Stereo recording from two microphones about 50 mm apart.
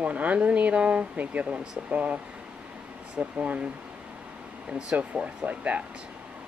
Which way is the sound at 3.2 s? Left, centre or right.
Right.